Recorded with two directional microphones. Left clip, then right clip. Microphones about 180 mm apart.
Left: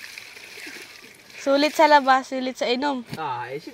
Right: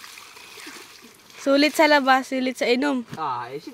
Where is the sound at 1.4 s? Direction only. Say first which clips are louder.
Even; 35° right (ahead or behind).